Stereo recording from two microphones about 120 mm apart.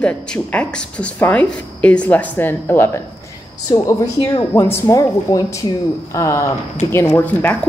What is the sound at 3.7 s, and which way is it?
A woman's voice, 30° left (ahead or behind).